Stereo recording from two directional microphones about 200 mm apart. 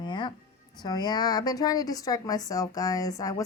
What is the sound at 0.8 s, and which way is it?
A woman's voice, 20° left (ahead or behind).